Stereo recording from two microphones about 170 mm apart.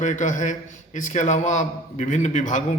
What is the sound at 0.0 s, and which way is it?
A man's voice, 45° left (ahead or behind).